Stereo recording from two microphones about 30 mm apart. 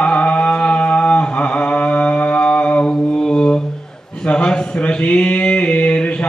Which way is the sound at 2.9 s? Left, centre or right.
Left.